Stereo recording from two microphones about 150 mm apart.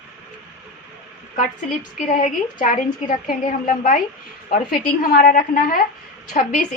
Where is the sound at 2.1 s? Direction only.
60° left (ahead or behind).